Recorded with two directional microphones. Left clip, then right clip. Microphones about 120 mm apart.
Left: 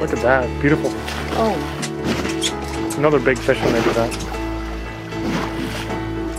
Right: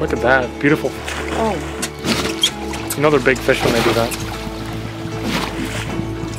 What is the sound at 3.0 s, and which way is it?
Speech, 30° right (ahead or behind).